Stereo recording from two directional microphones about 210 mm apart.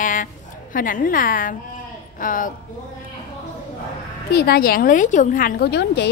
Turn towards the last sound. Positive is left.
turn(degrees=55)  # may be behind; listen again after turning